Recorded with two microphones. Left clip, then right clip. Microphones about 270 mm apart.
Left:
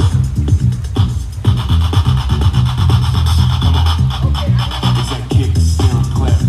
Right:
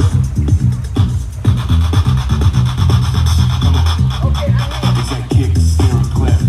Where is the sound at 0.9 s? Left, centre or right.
Left.